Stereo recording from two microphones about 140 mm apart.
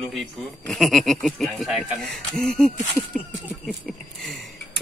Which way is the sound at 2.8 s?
15° left (ahead or behind).